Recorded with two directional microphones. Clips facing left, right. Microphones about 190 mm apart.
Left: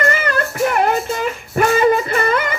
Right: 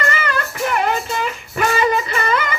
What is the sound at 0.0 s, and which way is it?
Music, 50° left (ahead or behind).